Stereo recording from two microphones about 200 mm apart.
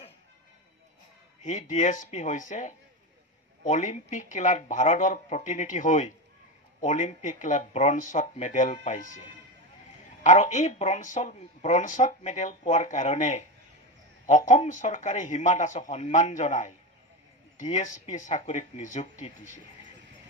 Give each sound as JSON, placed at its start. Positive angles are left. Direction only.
{"t": 1.4, "sound": "speech", "side_deg": 35}